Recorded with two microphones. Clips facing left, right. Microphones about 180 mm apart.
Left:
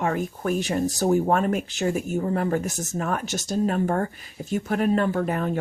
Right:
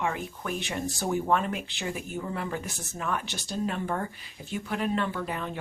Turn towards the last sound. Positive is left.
turn(degrees=45)  # may be behind; listen again after turning